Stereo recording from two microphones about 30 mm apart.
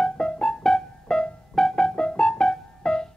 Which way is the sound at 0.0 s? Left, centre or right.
Centre.